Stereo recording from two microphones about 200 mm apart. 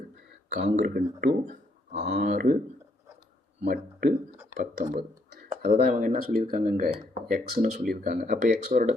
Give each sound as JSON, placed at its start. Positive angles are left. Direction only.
{"t": 0.8, "sound": "speech", "side_deg": -45}
{"t": 2.1, "sound": "speech", "side_deg": -50}
{"t": 3.6, "sound": "speech", "side_deg": -50}